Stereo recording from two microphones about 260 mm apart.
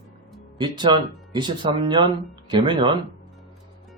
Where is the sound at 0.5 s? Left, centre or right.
Centre.